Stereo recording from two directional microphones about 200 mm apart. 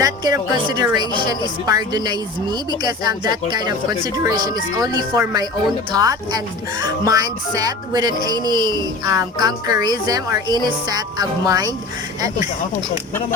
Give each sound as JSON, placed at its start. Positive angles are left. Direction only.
{"t": 0.0, "sound": "music", "side_deg": -20}